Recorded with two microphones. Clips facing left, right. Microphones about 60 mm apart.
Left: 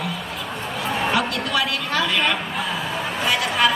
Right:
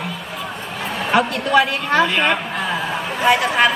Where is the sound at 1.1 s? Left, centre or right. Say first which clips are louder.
Right 9 dB; right.